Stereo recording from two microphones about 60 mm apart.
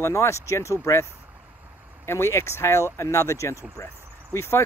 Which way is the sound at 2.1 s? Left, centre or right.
Left.